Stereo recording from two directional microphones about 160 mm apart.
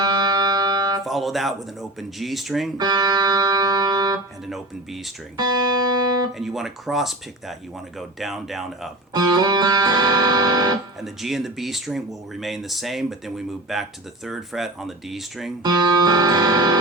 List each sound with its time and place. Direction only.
0.0 s music: 25° right (ahead or behind)
1.0 s speech: centre (ahead or behind)
2.7 s music: 25° right (ahead or behind)
4.4 s speech: centre (ahead or behind)
5.4 s music: 25° right (ahead or behind)
6.3 s speech: centre (ahead or behind)
9.1 s music: 25° right (ahead or behind)
11.0 s speech: centre (ahead or behind)
15.6 s music: 25° right (ahead or behind)